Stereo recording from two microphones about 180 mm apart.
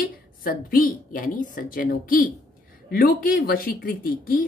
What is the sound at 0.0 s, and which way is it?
A woman's voice, 55° left (ahead or behind).